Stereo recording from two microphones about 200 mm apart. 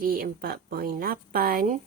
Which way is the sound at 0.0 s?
45° right (ahead or behind).